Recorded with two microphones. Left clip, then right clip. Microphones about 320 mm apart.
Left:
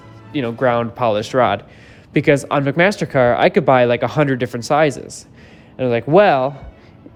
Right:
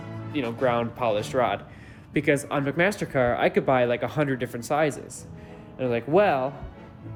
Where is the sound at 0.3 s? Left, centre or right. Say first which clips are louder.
Left 8 dB; left.